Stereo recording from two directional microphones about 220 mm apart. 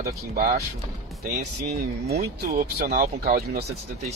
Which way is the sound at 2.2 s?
35° right (ahead or behind).